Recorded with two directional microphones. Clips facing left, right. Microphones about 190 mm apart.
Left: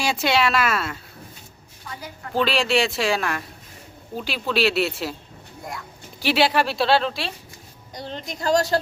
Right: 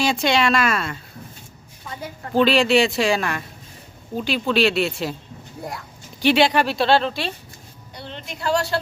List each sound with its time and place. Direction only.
0.0 s speech: 5° left (ahead or behind)
2.3 s speech: centre (ahead or behind)
6.1 s speech: 5° left (ahead or behind)
7.9 s a woman's voice: 40° left (ahead or behind)